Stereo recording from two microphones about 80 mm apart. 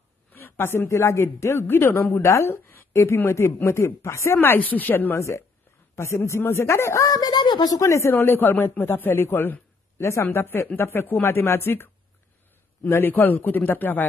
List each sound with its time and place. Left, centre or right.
0.3 s a woman's voice: left
5.1 s a woman's voice: left
7.8 s a man's voice: left